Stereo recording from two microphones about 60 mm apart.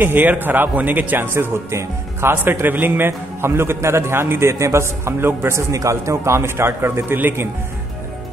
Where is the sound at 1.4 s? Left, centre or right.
Right.